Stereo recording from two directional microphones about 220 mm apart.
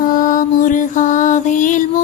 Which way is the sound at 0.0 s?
40° left (ahead or behind).